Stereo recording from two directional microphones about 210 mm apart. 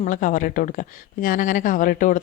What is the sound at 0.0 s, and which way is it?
Speech, 40° left (ahead or behind).